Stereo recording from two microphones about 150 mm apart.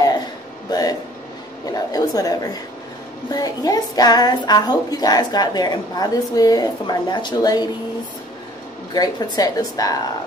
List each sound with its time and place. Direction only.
0.7 s a sound: 25° left (ahead or behind)
1.7 s a woman's voice: 25° left (ahead or behind)
8.9 s speech: 25° left (ahead or behind)